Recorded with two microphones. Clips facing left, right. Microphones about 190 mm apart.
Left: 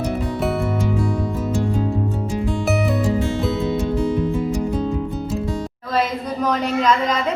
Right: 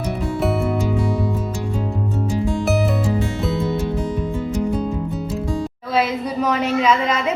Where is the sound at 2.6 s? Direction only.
Centre (ahead or behind).